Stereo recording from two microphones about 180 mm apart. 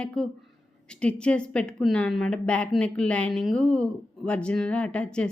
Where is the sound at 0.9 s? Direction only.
5° left (ahead or behind).